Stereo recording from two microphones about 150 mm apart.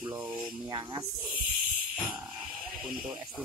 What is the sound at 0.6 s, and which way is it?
Speech, 25° right (ahead or behind).